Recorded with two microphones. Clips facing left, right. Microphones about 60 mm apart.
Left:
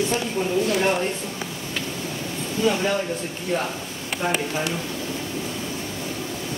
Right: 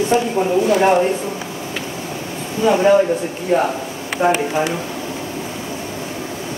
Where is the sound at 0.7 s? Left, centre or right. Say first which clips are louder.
Right 9 dB; centre.